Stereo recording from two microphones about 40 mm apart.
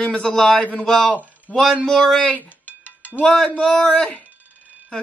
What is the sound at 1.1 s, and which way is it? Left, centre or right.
Speech, left.